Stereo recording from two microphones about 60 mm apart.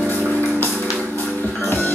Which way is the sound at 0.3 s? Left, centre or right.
Left.